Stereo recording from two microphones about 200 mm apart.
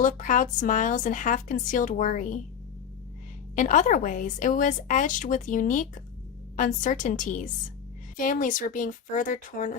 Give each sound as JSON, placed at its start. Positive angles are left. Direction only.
{"t": 0.0, "sound": "a woman's voice", "side_deg": 40}
{"t": 3.5, "sound": "a woman's voice", "side_deg": 40}